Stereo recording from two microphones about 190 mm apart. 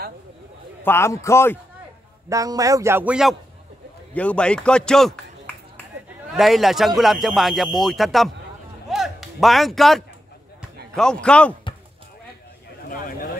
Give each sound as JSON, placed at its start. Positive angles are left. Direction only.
{"t": 0.8, "sound": "a man's voice", "side_deg": 15}
{"t": 2.2, "sound": "a man's voice", "side_deg": -20}
{"t": 4.1, "sound": "speech", "side_deg": 5}
{"t": 6.3, "sound": "speech", "side_deg": 0}
{"t": 8.8, "sound": "music", "side_deg": 0}
{"t": 11.0, "sound": "speech", "side_deg": 5}